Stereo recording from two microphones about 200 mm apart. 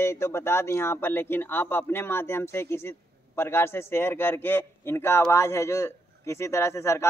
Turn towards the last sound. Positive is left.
turn(degrees=15)  # may be behind; listen again after turning